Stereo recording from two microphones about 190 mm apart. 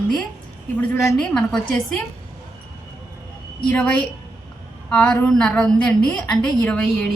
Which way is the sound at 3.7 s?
5° left (ahead or behind).